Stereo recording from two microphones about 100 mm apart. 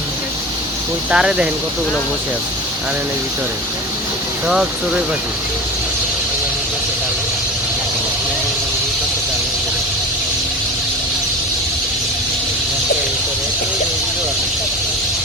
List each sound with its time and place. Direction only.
1.1 s speech: 10° right (ahead or behind)
4.4 s speech: 5° right (ahead or behind)